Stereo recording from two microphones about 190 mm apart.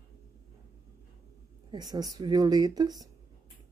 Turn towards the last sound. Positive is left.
turn(degrees=-20)  # may be behind; listen again after turning